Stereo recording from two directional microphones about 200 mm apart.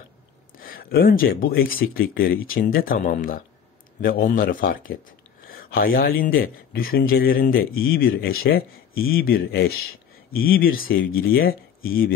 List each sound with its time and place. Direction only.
0.6 s speech: 45° left (ahead or behind)